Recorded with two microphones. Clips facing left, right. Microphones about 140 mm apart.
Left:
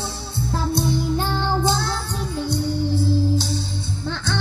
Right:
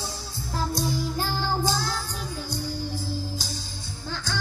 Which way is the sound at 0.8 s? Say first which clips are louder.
Left 5 dB; 25° left (ahead or behind).